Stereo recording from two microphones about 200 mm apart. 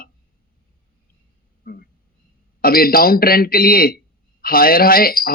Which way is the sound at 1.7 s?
45° left (ahead or behind).